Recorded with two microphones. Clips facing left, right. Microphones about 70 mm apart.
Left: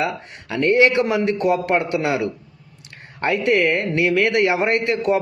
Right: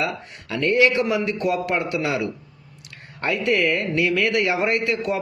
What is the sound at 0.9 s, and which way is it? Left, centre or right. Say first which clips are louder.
A man's voice: left 3 dB; left.